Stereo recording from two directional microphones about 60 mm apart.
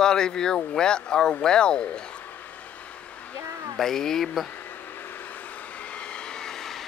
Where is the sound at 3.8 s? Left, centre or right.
Centre.